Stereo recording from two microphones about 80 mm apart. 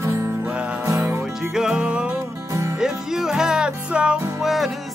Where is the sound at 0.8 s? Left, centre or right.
Right.